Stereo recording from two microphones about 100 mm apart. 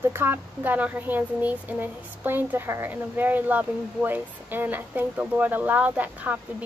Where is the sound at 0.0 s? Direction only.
25° right (ahead or behind).